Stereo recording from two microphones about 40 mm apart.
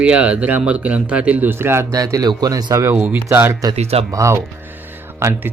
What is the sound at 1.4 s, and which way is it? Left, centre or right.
Speech, right.